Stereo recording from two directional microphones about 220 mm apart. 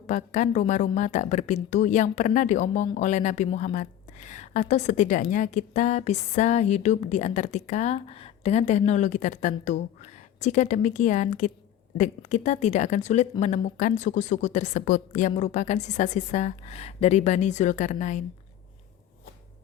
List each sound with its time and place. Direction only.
0.1 s a woman's voice: 35° left (ahead or behind)